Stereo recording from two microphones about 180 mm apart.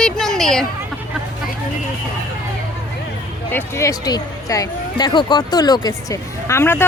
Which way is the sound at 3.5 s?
15° left (ahead or behind).